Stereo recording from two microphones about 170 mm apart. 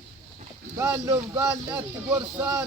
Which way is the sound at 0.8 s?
15° right (ahead or behind).